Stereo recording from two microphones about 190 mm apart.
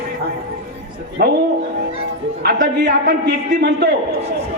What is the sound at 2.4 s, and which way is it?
Speech, 55° right (ahead or behind).